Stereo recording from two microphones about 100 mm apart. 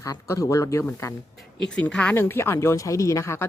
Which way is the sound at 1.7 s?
10° left (ahead or behind).